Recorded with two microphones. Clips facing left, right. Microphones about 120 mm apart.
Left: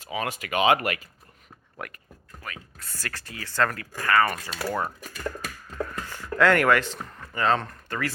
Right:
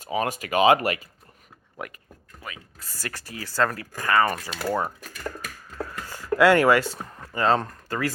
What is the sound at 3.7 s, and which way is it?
Speech, 20° right (ahead or behind).